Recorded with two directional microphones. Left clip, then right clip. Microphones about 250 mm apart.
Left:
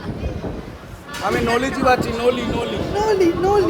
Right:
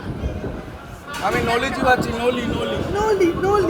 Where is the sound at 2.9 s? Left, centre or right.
Right.